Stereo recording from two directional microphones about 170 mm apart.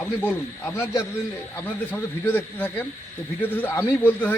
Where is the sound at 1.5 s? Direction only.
10° left (ahead or behind).